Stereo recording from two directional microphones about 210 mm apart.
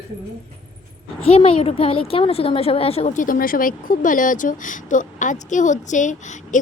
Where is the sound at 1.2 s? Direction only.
30° left (ahead or behind).